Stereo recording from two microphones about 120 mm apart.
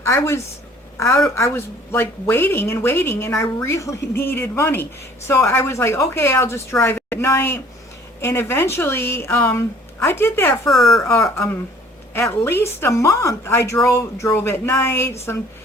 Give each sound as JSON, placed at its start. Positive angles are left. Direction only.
{"t": 0.0, "sound": "a woman's voice", "side_deg": 20}
{"t": 10.7, "sound": "speech", "side_deg": 0}
{"t": 11.0, "sound": "a woman's voice", "side_deg": 25}